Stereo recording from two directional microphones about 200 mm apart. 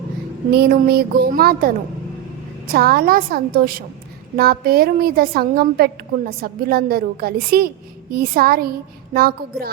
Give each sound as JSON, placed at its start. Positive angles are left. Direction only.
{"t": 0.5, "sound": "a woman's voice", "side_deg": -50}